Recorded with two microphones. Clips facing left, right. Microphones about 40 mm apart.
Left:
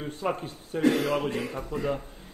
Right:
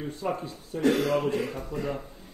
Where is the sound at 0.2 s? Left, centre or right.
Left.